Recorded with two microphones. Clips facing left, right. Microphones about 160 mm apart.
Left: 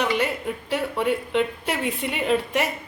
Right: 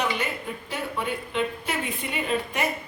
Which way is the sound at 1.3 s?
75° left (ahead or behind).